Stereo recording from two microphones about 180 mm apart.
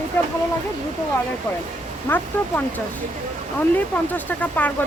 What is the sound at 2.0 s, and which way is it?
Speech, 10° left (ahead or behind).